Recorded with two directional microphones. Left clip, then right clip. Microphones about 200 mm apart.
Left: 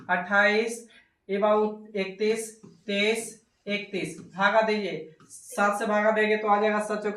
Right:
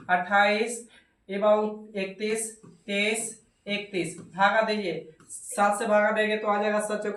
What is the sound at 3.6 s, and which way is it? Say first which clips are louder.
Speech: even; 25° right (ahead or behind).